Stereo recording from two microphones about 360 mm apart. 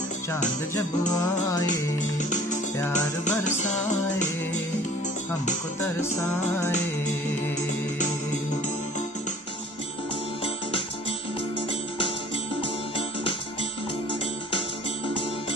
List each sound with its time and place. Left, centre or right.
1.7 s music: left
12.6 s music: centre